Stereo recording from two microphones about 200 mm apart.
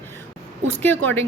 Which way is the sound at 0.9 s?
70° right (ahead or behind).